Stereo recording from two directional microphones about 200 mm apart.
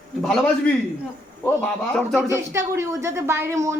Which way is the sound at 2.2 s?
15° right (ahead or behind).